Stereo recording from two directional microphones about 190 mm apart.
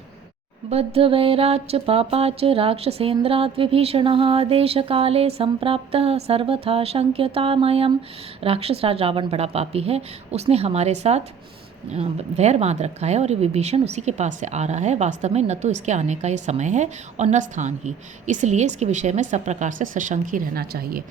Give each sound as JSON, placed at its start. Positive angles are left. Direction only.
{"t": 0.9, "sound": "speech", "side_deg": -30}